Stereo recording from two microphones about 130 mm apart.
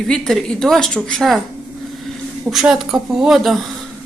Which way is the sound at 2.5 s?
Centre (ahead or behind).